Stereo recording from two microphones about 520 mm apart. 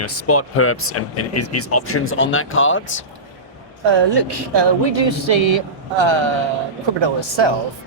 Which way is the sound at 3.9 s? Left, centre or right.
Right.